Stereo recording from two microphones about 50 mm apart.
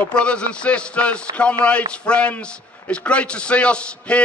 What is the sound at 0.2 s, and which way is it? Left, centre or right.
A man's voice, left.